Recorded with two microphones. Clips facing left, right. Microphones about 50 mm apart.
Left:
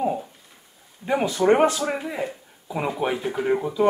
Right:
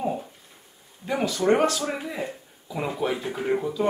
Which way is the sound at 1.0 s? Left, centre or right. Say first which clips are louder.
Left 3 dB; left.